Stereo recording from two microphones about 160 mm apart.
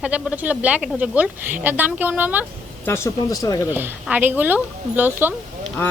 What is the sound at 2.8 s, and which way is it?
Speech, 15° left (ahead or behind).